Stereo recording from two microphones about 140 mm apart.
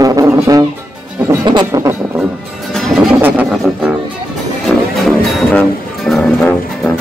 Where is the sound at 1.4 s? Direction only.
25° right (ahead or behind).